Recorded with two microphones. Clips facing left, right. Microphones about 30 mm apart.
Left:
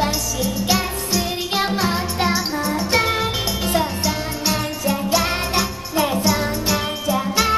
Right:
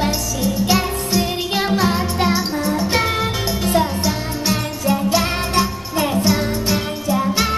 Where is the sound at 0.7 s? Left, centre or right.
Centre.